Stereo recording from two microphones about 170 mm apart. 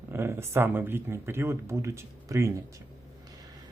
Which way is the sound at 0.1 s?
15° right (ahead or behind).